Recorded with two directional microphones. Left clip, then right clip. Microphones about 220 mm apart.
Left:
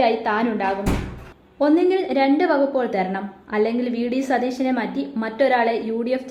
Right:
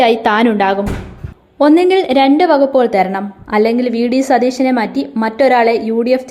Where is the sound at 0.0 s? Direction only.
35° right (ahead or behind).